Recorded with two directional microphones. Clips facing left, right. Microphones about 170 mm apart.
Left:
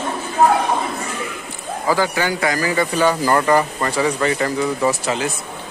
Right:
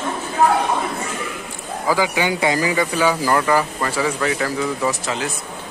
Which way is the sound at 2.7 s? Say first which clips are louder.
Left 1 dB; 10° right (ahead or behind).